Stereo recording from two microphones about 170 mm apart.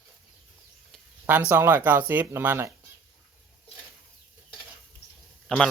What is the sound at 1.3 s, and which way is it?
Speech, 10° right (ahead or behind).